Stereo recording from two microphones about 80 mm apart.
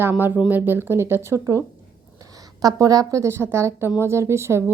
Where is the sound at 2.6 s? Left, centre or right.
Right.